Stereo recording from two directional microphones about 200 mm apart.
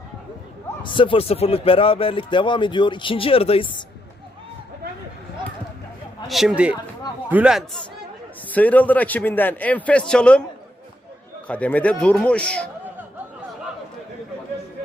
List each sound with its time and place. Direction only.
0.8 s a man's voice: 25° left (ahead or behind)
6.2 s speech: centre (ahead or behind)
8.4 s a man's voice: 10° left (ahead or behind)
11.4 s a man's voice: 5° left (ahead or behind)